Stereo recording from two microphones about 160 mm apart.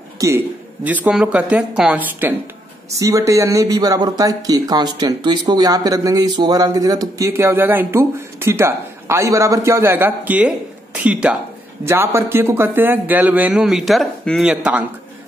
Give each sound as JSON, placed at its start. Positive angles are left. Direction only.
{"t": 0.2, "sound": "a man's voice", "side_deg": -20}
{"t": 0.8, "sound": "speech", "side_deg": -10}